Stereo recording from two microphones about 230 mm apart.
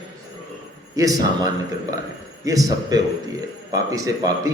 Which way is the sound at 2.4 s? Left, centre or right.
Centre.